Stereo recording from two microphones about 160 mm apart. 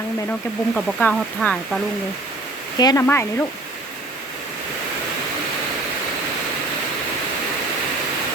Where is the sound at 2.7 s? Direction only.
25° left (ahead or behind).